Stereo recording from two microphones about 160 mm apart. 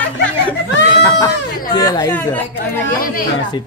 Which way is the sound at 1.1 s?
25° left (ahead or behind).